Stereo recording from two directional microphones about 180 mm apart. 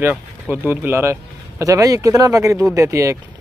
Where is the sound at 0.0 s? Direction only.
10° right (ahead or behind).